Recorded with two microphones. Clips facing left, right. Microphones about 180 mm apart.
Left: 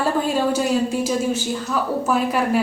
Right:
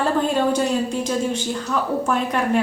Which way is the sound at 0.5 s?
5° left (ahead or behind).